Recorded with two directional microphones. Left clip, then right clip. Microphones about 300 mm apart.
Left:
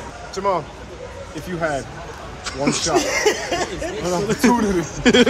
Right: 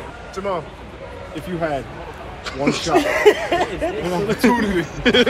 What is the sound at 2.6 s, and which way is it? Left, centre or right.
Speech, centre.